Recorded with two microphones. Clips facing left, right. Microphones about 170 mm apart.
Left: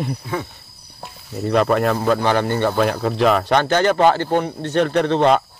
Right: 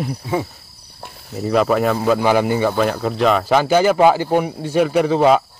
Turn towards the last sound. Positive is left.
turn(degrees=-5)  # may be behind; listen again after turning